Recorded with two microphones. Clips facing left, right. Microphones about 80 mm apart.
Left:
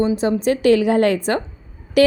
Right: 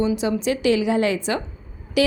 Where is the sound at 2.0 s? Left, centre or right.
Left.